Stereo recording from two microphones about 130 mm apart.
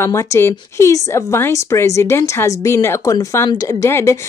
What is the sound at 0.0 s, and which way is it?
Speech, 20° left (ahead or behind).